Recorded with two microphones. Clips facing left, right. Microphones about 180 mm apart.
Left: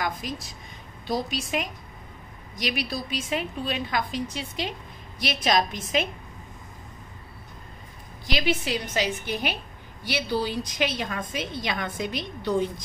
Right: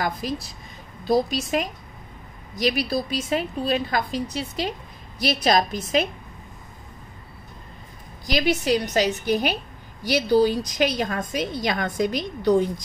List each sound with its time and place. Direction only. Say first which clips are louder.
0.0 s a woman's voice: right 4 dB; 35° right (ahead or behind)
8.3 s a woman's voice: right 5 dB; 40° right (ahead or behind)